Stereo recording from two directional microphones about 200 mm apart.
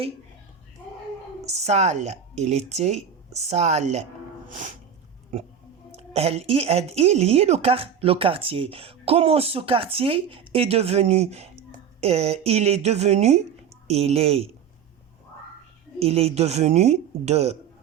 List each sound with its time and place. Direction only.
1.5 s speech: 35° right (ahead or behind)
4.4 s sneeze: 40° right (ahead or behind)
6.0 s a sound: 30° right (ahead or behind)
6.5 s speech: 30° right (ahead or behind)
16.0 s speech: 30° right (ahead or behind)